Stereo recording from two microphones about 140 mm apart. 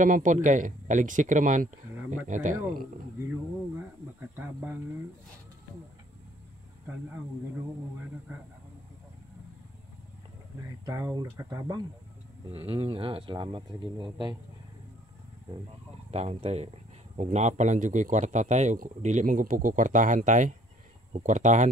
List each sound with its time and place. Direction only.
0.0 s a man's voice: 65° right (ahead or behind)
3.2 s a sound: 15° right (ahead or behind)
11.1 s speech: 25° right (ahead or behind)
12.4 s speech: 45° right (ahead or behind)
16.1 s a man's voice: 50° right (ahead or behind)